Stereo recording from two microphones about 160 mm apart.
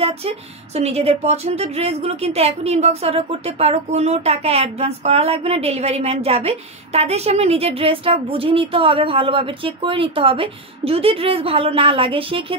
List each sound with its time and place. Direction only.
0.7 s speech: 40° right (ahead or behind)